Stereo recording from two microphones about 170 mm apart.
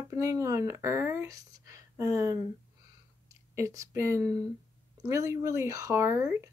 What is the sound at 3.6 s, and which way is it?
Speech, 20° right (ahead or behind).